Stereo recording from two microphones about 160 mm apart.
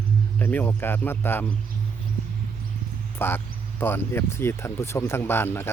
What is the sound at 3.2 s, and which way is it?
Speech, 15° left (ahead or behind).